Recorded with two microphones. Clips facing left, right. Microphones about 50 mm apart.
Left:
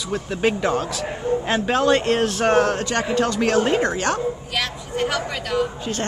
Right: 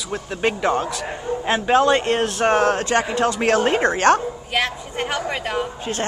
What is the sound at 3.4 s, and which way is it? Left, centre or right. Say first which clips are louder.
A woman's voice: right 2 dB; right.